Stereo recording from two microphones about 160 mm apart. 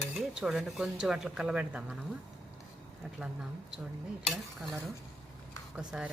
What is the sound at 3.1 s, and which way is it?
Speech, 5° right (ahead or behind).